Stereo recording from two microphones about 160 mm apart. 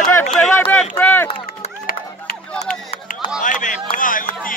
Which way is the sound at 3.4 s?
55° left (ahead or behind).